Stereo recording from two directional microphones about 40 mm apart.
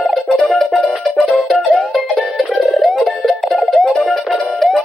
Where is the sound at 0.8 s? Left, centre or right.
Centre.